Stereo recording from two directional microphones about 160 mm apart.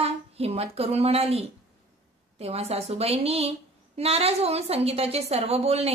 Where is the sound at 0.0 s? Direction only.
40° right (ahead or behind).